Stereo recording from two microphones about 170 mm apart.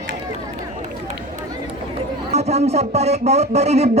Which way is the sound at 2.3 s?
40° right (ahead or behind).